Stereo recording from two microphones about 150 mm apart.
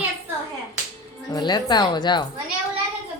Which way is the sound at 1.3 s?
30° left (ahead or behind).